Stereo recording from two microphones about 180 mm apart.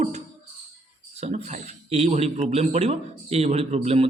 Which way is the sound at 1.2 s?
40° right (ahead or behind).